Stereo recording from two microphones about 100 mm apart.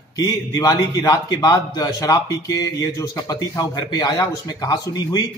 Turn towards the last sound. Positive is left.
turn(degrees=35)  # may be behind; listen again after turning